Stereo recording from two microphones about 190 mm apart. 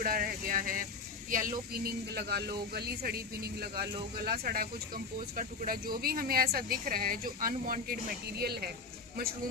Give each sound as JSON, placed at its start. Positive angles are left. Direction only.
{"t": 0.0, "sound": "speech", "side_deg": -50}